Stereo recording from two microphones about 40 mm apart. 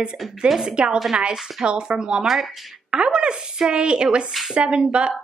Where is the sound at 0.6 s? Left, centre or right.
Centre.